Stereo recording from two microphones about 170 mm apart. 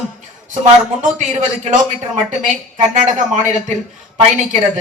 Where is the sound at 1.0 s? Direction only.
45° right (ahead or behind).